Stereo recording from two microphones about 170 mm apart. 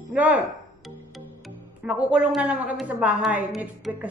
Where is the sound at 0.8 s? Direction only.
Centre (ahead or behind).